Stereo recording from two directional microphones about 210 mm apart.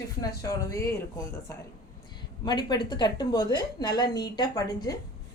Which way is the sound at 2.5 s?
20° left (ahead or behind).